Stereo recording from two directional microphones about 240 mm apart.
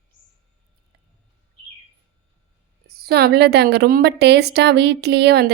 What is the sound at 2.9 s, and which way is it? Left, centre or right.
A woman's voice, right.